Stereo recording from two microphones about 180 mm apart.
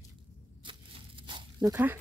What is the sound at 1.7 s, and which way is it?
Speech, 10° right (ahead or behind).